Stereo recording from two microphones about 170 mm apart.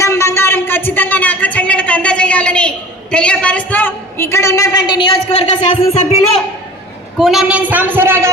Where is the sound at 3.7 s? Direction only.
10° left (ahead or behind); by 6.4 s 40° left (ahead or behind).